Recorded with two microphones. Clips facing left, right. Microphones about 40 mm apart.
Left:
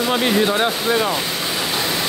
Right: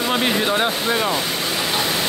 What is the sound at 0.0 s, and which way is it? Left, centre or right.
Speech, centre.